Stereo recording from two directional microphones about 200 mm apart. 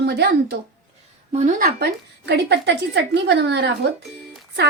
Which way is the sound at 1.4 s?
45° right (ahead or behind).